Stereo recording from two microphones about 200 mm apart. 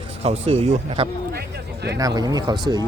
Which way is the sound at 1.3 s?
55° right (ahead or behind).